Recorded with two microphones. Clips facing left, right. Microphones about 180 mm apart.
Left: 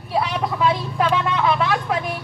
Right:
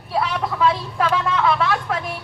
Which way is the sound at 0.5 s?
25° left (ahead or behind).